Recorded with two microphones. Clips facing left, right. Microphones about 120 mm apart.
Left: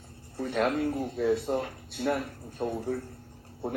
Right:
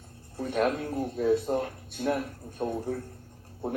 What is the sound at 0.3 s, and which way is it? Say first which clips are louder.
A man's voice: even; 45° right (ahead or behind).